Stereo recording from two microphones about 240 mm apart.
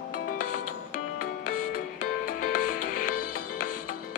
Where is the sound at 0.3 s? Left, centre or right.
Left.